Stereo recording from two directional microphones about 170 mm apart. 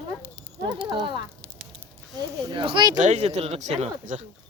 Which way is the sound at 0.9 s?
25° right (ahead or behind).